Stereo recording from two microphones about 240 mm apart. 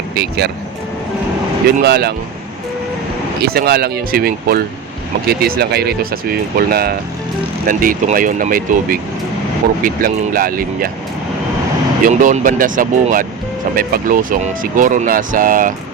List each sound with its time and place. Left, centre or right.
0.2 s speech: right
1.8 s speech: right
3.4 s speech: right
12.0 s speech: right